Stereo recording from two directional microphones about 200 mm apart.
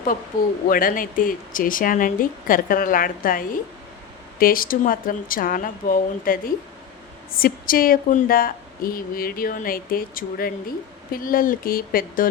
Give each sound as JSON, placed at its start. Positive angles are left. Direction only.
{"t": 0.7, "sound": "a woman's voice", "side_deg": 45}